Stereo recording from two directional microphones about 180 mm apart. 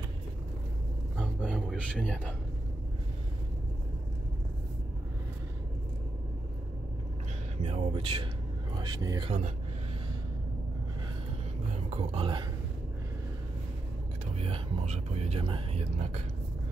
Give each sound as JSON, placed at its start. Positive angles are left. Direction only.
{"t": 1.1, "sound": "a sound", "side_deg": 0}
{"t": 7.6, "sound": "music", "side_deg": -30}
{"t": 8.8, "sound": "speech", "side_deg": -20}
{"t": 11.7, "sound": "speech", "side_deg": -35}
{"t": 14.3, "sound": "speech", "side_deg": -35}